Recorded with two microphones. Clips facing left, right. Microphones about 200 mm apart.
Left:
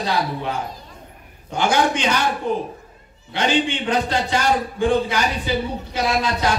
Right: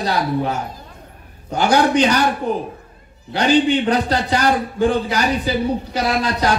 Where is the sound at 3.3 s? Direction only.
40° right (ahead or behind).